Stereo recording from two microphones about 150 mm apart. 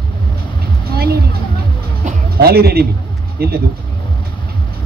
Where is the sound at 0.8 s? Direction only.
90° right.